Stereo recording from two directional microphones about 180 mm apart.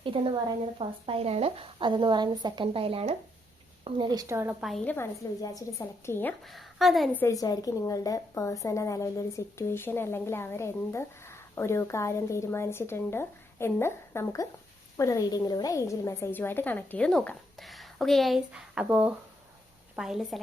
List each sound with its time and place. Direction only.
0.0 s speech: 30° right (ahead or behind); by 4.5 s 15° right (ahead or behind)
4.6 s a woman's voice: centre (ahead or behind)
4.9 s a woman's voice: 15° left (ahead or behind)
6.4 s a woman's voice: centre (ahead or behind)
7.2 s a woman's voice: 20° left (ahead or behind); by 20.4 s centre (ahead or behind)